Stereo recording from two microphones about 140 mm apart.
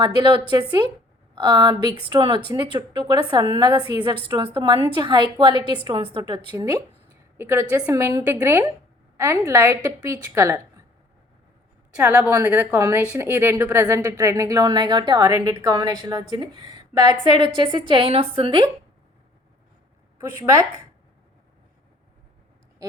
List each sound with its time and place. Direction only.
0.0 s a woman's voice: 35° right (ahead or behind)
7.0 s a sound: 15° right (ahead or behind)
7.8 s a woman's voice: 25° right (ahead or behind)
11.9 s a woman's voice: 10° right (ahead or behind); by 18.7 s 35° right (ahead or behind)
20.2 s a woman's voice: 20° right (ahead or behind)